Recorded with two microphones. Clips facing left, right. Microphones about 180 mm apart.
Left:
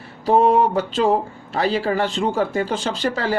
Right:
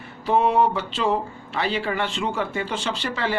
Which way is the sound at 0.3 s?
40° left (ahead or behind).